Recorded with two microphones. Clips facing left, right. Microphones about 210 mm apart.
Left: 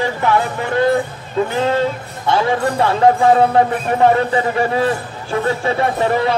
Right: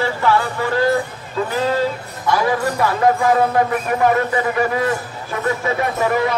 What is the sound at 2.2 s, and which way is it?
Speech, 25° left (ahead or behind).